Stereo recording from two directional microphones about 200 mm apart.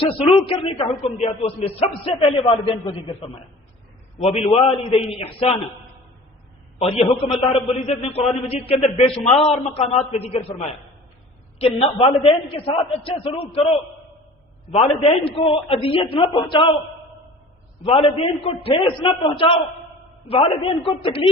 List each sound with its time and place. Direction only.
0.2 s a man's voice: 30° left (ahead or behind)
6.7 s a man's voice: 30° left (ahead or behind)
17.8 s a man's voice: 30° left (ahead or behind)